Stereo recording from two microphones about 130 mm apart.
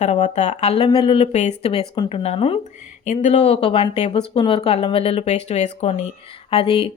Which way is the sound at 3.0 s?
65° left (ahead or behind).